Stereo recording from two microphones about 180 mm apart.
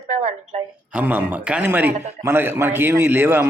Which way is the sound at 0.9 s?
10° right (ahead or behind).